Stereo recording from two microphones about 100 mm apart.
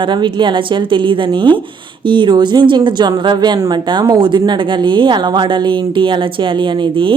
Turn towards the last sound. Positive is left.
turn(degrees=-55)  # may be behind; listen again after turning